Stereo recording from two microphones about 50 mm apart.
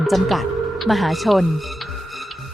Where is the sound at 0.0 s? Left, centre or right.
Centre.